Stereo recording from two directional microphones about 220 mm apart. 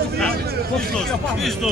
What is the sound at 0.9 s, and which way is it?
Speech, centre (ahead or behind).